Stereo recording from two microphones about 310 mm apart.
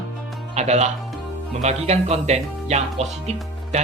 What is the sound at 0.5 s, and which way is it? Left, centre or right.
Speech, right.